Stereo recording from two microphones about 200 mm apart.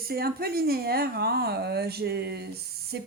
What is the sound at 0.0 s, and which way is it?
A woman's voice, 50° right (ahead or behind).